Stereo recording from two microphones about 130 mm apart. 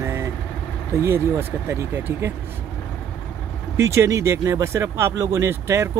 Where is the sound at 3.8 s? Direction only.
20° right (ahead or behind).